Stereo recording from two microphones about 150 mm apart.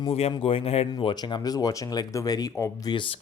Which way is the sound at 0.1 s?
40° left (ahead or behind).